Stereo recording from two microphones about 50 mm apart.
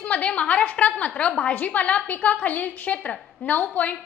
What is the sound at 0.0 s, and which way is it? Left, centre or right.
A woman's voice, left.